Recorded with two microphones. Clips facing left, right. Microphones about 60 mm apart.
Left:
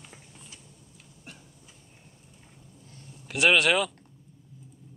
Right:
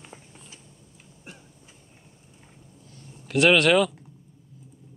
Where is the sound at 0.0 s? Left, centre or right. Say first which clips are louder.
Right 3 dB; right.